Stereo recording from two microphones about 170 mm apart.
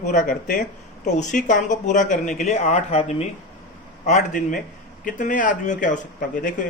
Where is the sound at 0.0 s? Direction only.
50° left (ahead or behind).